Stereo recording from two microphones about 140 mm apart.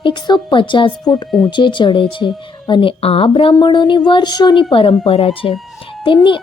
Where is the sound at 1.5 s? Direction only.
35° left (ahead or behind).